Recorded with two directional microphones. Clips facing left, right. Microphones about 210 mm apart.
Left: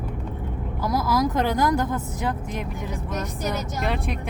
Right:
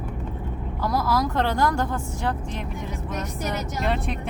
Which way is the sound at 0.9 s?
15° left (ahead or behind).